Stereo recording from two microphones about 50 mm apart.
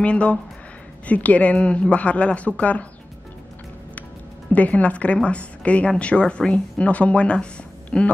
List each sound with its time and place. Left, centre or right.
0.0 s a woman's voice: left
4.5 s a woman's voice: left